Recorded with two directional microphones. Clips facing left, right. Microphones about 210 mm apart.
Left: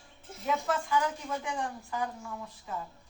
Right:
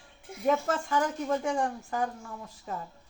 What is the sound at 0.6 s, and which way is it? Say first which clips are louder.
A woman's voice: right 1 dB; 45° right (ahead or behind).